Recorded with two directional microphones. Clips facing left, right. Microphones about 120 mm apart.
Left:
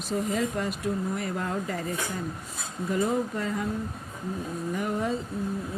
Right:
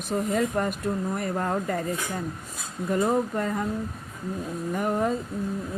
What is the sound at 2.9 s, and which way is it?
Speech, 50° right (ahead or behind).